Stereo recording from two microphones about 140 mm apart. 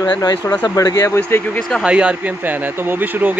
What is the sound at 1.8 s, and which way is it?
Speech, 10° right (ahead or behind).